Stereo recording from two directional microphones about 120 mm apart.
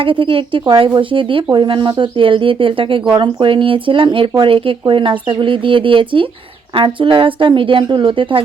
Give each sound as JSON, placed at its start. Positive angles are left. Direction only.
{"t": 0.0, "sound": "speech", "side_deg": -45}